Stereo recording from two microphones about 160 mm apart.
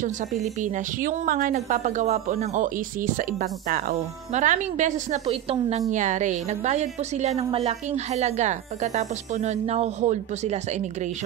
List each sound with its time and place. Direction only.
0.0 s a woman's voice: 50° right (ahead or behind)
4.3 s a woman's voice: 45° right (ahead or behind)
5.2 s a woman's voice: 35° right (ahead or behind)